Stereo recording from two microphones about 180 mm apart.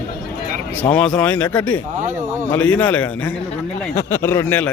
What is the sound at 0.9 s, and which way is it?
Speech, 5° left (ahead or behind).